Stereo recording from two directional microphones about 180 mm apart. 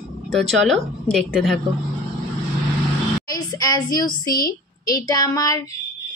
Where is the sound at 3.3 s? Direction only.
20° left (ahead or behind).